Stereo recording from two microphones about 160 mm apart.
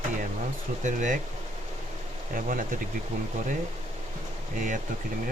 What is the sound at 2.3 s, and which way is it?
Speech, 60° right (ahead or behind).